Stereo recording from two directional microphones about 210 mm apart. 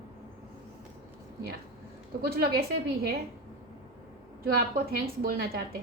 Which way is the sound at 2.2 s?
45° right (ahead or behind).